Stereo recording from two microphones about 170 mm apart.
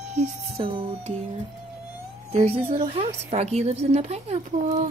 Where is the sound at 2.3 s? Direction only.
40° right (ahead or behind).